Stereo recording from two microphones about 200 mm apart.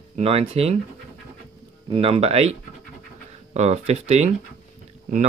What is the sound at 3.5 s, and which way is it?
Speech, 35° right (ahead or behind).